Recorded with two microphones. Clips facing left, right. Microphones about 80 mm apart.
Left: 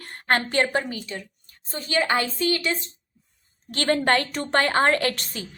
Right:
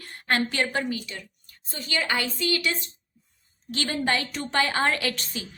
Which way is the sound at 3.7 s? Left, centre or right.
Left.